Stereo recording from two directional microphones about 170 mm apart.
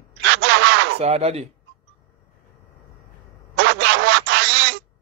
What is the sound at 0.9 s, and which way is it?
Speech, 40° right (ahead or behind).